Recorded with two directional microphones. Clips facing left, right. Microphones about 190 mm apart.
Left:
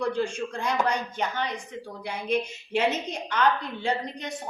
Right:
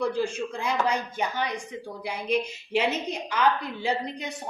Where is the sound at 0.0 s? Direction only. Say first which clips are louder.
Right 1 dB; 5° right (ahead or behind).